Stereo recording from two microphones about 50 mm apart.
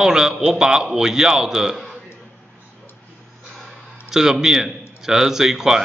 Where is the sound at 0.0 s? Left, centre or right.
Centre.